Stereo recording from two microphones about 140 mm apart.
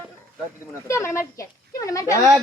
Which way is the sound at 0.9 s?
20° left (ahead or behind).